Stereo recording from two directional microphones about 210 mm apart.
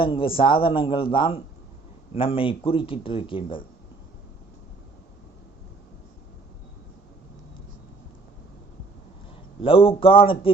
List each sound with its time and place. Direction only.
0.0 s speech: 25° left (ahead or behind)
9.6 s speech: 25° left (ahead or behind)